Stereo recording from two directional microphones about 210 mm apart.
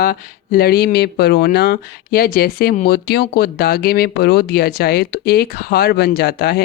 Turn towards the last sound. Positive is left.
turn(degrees=50)  # may be behind; listen again after turning